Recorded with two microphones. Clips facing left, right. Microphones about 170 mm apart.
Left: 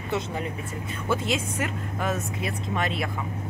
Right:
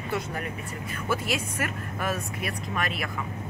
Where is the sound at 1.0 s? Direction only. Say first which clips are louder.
Left 2 dB; 20° left (ahead or behind).